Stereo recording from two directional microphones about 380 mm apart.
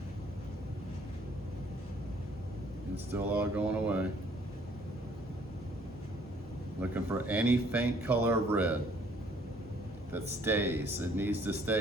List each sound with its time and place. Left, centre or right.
2.9 s speech: centre
6.9 s speech: centre
10.1 s speech: centre